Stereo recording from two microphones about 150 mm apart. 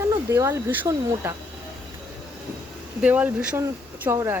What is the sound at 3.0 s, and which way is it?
Speech, 10° right (ahead or behind).